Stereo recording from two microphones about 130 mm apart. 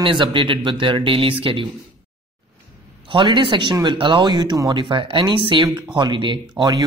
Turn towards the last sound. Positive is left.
turn(degrees=-30)  # may be behind; listen again after turning